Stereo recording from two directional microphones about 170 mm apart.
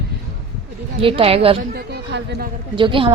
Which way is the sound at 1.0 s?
30° right (ahead or behind).